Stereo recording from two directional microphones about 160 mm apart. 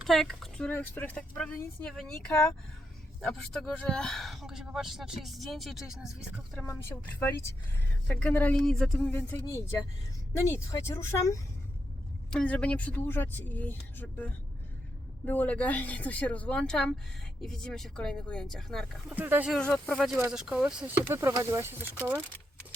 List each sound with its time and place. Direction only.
0.0 s speech: centre (ahead or behind)
6.6 s speech: 15° left (ahead or behind)
12.3 s speech: 5° left (ahead or behind)
19.1 s speech: 10° right (ahead or behind)
19.5 s speech: 5° left (ahead or behind); by 21.8 s 15° right (ahead or behind)